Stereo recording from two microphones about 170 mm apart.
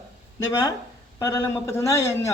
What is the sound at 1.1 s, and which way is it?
Speech, 20° left (ahead or behind).